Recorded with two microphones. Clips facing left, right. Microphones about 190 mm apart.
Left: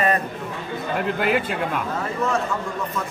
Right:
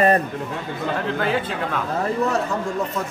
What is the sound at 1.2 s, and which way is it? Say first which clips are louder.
Speech: left 1 dB; 10° left (ahead or behind).